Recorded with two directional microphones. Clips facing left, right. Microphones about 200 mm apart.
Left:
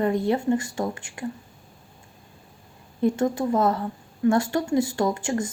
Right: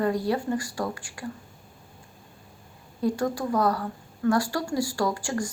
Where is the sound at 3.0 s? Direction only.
25° left (ahead or behind).